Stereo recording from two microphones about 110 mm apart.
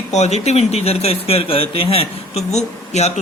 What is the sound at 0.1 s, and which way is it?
Speech, 90° left.